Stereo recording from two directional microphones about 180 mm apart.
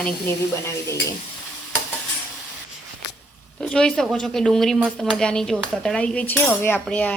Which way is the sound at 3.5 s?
5° left (ahead or behind).